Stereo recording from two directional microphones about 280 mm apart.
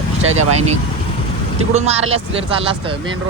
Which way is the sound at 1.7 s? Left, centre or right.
Right.